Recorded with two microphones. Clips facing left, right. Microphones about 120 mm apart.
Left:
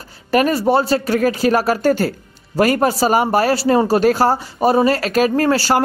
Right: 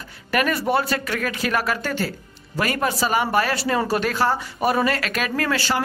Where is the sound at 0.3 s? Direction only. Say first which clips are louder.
Left 6 dB; 30° left (ahead or behind).